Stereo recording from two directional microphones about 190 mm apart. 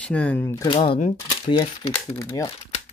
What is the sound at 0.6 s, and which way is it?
Speech, 25° left (ahead or behind).